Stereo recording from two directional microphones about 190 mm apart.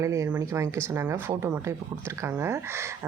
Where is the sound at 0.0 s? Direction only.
15° right (ahead or behind).